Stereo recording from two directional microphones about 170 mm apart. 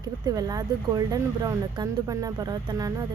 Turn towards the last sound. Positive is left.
turn(degrees=-20)  # may be behind; listen again after turning